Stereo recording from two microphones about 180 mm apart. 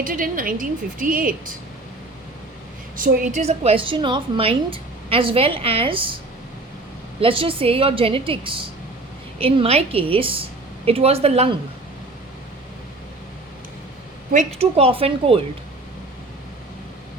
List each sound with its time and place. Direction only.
0.0 s a woman's voice: 50° right (ahead or behind)
2.9 s a woman's voice: 50° right (ahead or behind); by 6.1 s 30° right (ahead or behind)
7.2 s a woman's voice: 30° right (ahead or behind)
14.3 s a woman's voice: 35° right (ahead or behind)